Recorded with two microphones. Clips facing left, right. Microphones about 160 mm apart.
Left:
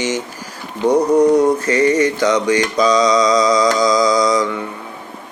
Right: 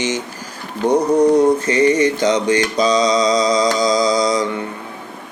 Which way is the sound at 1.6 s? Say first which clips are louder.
Even; 20° right (ahead or behind).